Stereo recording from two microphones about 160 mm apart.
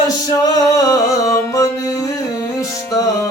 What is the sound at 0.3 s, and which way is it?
Music, 25° left (ahead or behind).